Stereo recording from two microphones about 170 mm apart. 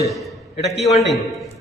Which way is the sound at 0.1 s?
Centre (ahead or behind).